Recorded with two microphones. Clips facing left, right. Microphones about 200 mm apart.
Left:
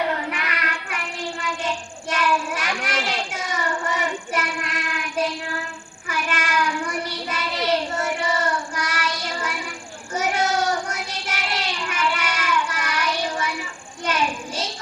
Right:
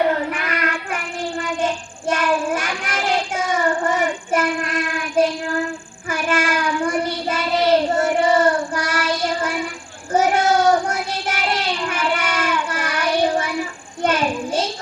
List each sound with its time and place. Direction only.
0.3 s child singing: 45° right (ahead or behind)